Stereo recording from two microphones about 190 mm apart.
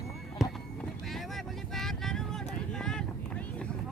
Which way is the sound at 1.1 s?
Centre (ahead or behind).